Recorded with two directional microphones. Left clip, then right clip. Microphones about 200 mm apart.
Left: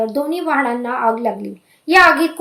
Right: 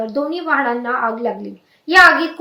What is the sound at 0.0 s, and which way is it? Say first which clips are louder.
A woman's voice: left 2 dB; 35° left (ahead or behind).